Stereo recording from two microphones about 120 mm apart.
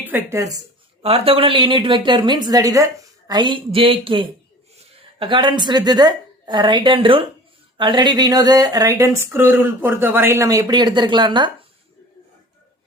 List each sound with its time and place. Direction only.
0.0 s speech: 20° right (ahead or behind)
1.0 s a woman's voice: 55° right (ahead or behind)